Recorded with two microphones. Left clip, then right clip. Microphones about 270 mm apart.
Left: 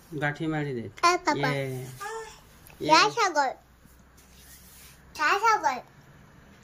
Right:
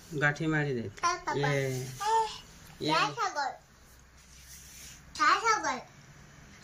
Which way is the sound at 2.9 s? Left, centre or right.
Left.